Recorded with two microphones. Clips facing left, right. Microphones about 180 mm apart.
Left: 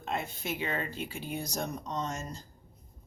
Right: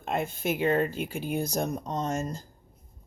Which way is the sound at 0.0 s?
50° right (ahead or behind).